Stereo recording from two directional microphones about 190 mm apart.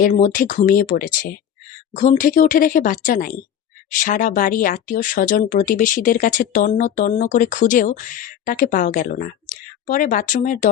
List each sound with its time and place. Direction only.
0.0 s speech: 45° left (ahead or behind)